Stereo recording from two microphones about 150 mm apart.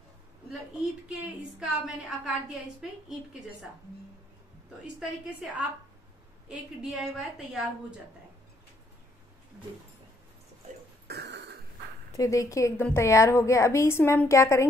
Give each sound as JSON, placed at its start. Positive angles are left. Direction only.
{"t": 1.6, "sound": "a woman's voice", "side_deg": -5}
{"t": 6.8, "sound": "a woman's voice", "side_deg": -5}
{"t": 11.1, "sound": "a sound", "side_deg": -90}
{"t": 12.2, "sound": "a woman's voice", "side_deg": 20}